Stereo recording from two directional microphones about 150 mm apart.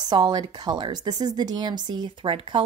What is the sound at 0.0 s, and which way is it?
Speech, 30° right (ahead or behind).